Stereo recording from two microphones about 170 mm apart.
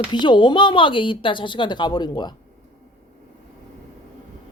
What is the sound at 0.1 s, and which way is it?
Speech, 25° left (ahead or behind).